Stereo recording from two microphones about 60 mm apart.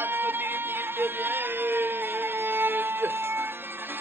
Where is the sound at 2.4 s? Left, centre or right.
Right.